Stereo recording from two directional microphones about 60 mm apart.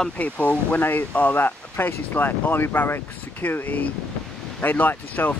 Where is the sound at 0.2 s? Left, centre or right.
Left.